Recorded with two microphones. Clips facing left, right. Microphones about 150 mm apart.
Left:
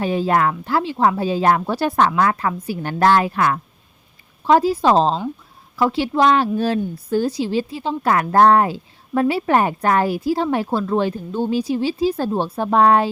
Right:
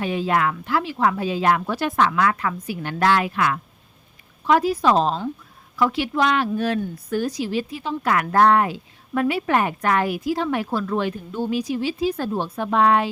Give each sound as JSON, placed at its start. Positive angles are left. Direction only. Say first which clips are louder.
{"t": 0.0, "sound": "a woman's voice", "louder": "left 3 dB", "side_deg": 35}